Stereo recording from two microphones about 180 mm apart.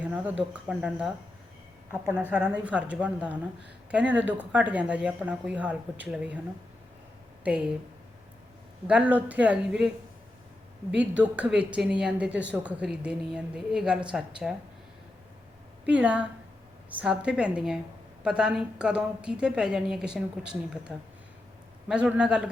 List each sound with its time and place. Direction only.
0.0 s speech: 10° right (ahead or behind)
7.4 s speech: 5° right (ahead or behind)
8.9 s speech: 10° right (ahead or behind)
11.2 s a woman's voice: 5° right (ahead or behind)
15.9 s a woman's voice: 5° right (ahead or behind)